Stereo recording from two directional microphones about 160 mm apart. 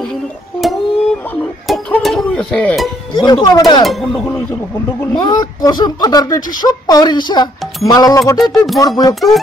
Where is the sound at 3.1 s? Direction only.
25° left (ahead or behind).